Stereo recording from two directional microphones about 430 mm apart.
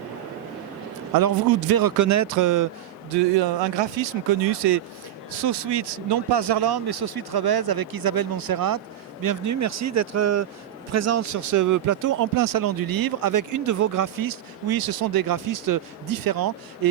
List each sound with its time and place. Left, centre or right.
1.1 s speech: right
3.8 s speech: right